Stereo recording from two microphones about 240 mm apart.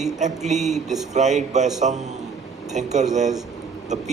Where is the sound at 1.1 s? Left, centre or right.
Right.